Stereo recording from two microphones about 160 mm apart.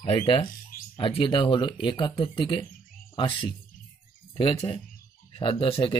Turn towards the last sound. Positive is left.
turn(degrees=35)  # may be behind; listen again after turning